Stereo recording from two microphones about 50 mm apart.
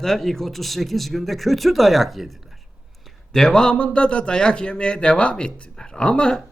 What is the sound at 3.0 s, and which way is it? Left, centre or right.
A man's voice, centre.